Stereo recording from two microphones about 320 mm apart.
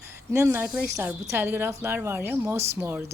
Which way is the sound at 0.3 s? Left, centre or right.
Centre.